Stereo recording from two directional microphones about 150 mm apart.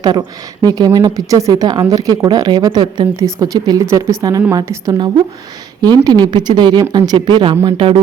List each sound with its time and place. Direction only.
0.0 s a woman's voice: 25° right (ahead or behind)